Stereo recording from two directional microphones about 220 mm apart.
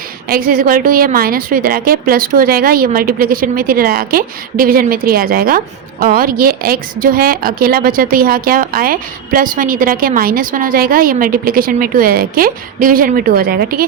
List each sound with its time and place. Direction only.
0.3 s a woman's voice: 40° right (ahead or behind)